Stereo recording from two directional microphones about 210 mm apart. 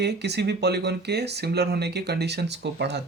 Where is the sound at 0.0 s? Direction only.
55° right (ahead or behind).